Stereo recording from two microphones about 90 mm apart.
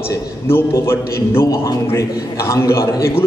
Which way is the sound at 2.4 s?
30° left (ahead or behind).